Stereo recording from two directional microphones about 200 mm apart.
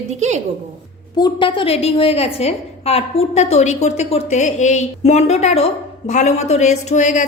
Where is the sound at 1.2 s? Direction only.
25° left (ahead or behind).